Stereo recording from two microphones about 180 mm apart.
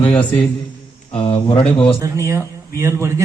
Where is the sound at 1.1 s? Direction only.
30° left (ahead or behind).